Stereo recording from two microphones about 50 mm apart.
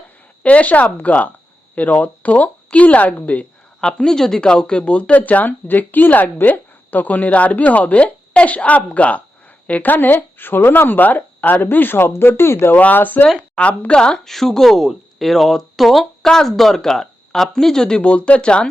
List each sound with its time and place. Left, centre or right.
0.4 s speech: left
3.8 s speech: centre; by 12.7 s left
12.7 s speech: left
13.6 s speech: left
14.3 s speech: centre